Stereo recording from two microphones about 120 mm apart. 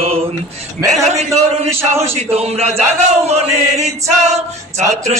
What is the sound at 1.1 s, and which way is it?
Choir, 65° right (ahead or behind).